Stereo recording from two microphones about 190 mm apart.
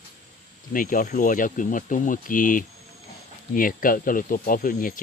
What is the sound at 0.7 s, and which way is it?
Speech, 45° left (ahead or behind).